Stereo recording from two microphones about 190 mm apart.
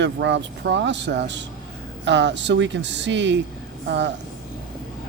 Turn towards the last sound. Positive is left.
turn(degrees=-65)  # may be behind; listen again after turning